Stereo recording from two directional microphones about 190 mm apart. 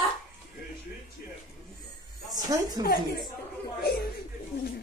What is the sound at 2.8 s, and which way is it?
Speech, 20° right (ahead or behind).